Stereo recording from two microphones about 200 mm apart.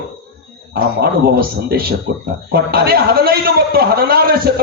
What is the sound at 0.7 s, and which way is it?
A man's voice, 50° right (ahead or behind).